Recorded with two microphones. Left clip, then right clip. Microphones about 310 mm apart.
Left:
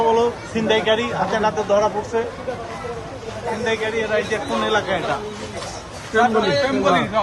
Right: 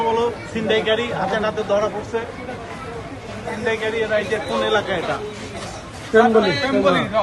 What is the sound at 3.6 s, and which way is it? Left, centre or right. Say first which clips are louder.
Speech: right 1 dB; left.